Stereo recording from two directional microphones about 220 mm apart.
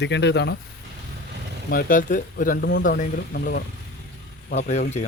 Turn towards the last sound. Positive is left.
turn(degrees=30)  # may be behind; listen again after turning